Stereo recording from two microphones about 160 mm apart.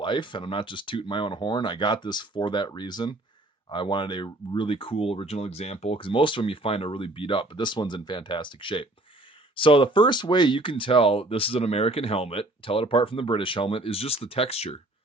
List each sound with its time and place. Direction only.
0.0 s speech: 30° left (ahead or behind)